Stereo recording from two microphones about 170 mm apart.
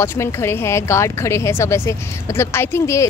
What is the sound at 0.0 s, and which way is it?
Speech, 15° left (ahead or behind).